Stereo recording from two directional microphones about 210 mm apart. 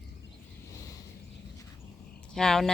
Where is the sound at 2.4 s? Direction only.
Centre (ahead or behind).